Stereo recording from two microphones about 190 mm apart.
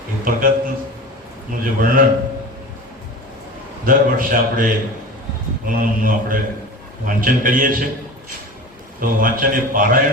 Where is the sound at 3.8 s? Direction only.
45° right (ahead or behind).